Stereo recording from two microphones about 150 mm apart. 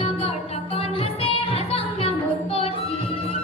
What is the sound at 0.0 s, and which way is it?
Music, 40° left (ahead or behind).